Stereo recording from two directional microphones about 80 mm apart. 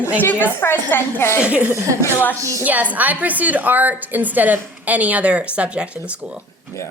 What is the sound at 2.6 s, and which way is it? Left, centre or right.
A woman's voice, centre.